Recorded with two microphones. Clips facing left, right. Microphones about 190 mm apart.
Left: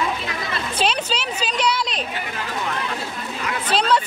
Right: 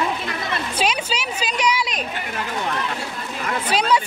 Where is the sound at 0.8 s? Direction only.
10° right (ahead or behind).